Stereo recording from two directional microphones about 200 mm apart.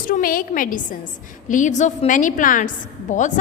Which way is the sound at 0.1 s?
45° left (ahead or behind).